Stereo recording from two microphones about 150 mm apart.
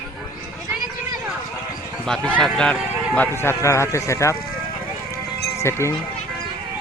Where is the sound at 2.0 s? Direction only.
5° left (ahead or behind).